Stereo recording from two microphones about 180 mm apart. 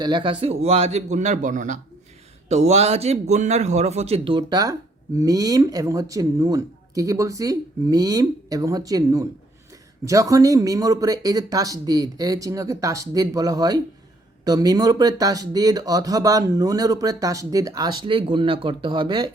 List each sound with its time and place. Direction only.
0.0 s a man's voice: 25° right (ahead or behind)